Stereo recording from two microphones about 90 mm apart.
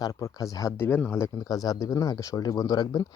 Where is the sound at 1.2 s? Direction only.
45° left (ahead or behind).